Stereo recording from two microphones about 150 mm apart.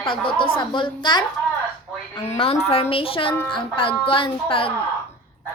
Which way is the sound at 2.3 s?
45° left (ahead or behind).